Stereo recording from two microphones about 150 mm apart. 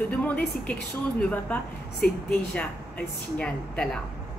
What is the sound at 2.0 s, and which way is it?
Speech, 90° left.